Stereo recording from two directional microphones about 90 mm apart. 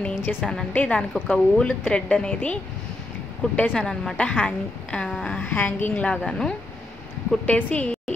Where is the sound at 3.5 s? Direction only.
10° left (ahead or behind).